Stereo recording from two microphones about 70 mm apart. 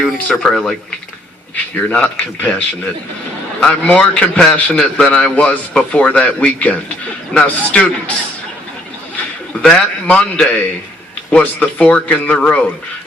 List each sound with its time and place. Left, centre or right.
0.0 s speech: centre
1.9 s a man's voice: left
9.6 s a man's voice: centre